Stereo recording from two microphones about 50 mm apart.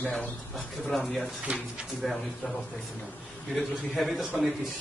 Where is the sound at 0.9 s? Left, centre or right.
Centre.